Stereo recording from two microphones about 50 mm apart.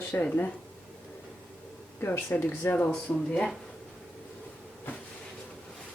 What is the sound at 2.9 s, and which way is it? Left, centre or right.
Speech, centre.